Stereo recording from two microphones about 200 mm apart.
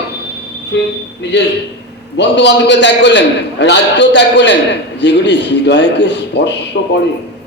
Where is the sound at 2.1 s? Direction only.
60° left (ahead or behind).